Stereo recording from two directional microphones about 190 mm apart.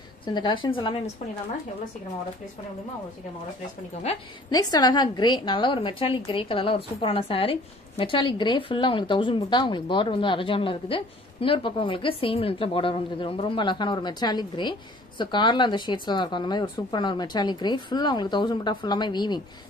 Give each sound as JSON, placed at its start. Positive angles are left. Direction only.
{"t": 0.2, "sound": "a woman's voice", "side_deg": 25}
{"t": 4.1, "sound": "a woman's voice", "side_deg": 35}
{"t": 4.5, "sound": "a woman's voice", "side_deg": 20}